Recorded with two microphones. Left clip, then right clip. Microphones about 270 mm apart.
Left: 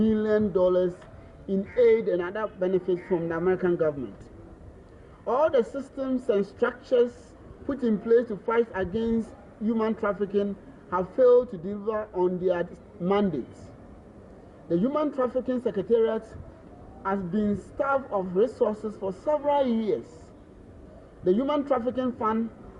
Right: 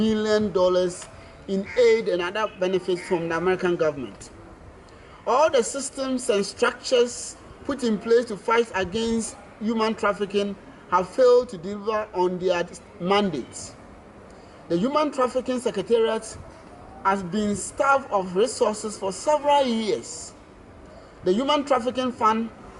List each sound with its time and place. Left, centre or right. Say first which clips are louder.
0.0 s speech: right 2 dB; centre
5.3 s speech: right 3 dB; centre
8.1 s speech: right 3 dB; centre
14.7 s speech: right 3 dB; centre
21.2 s speech: right 3 dB; centre